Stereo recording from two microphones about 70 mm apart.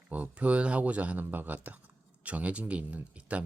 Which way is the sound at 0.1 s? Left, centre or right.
Right.